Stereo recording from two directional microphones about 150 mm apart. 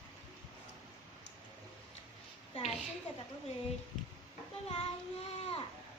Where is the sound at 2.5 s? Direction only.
45° left (ahead or behind).